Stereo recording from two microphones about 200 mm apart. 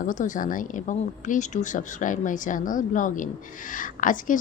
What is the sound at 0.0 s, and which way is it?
A woman's voice, 40° left (ahead or behind).